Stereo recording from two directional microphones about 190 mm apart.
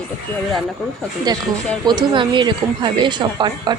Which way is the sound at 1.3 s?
20° right (ahead or behind).